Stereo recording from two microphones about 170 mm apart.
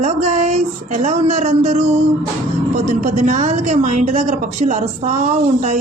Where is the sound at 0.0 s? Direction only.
45° right (ahead or behind).